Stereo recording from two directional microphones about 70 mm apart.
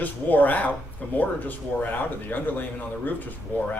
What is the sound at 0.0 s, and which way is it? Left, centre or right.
Speech, left.